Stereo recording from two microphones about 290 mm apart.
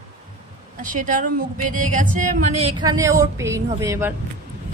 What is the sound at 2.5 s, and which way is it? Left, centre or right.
Speech, right.